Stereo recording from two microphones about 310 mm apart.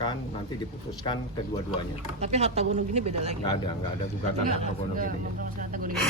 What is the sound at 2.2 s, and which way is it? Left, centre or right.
Speech, centre.